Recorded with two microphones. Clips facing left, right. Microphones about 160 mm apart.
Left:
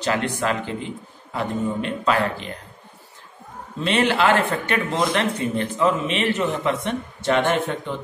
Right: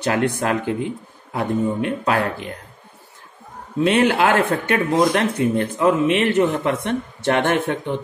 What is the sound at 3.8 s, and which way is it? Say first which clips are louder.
Speech: right 4 dB; 50° right (ahead or behind).